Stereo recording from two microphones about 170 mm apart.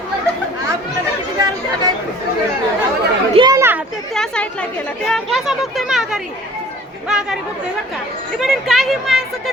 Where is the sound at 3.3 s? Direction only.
30° right (ahead or behind).